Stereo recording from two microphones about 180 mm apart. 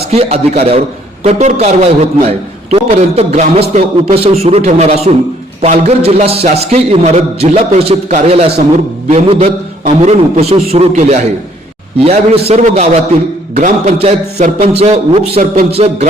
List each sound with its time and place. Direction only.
0.1 s a man's voice: 35° right (ahead or behind)